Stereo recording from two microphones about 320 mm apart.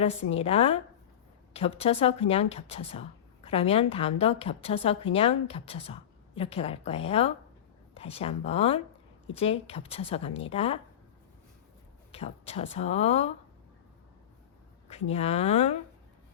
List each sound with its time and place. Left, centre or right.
0.0 s a woman's voice: centre
12.1 s speech: centre
15.1 s speech: centre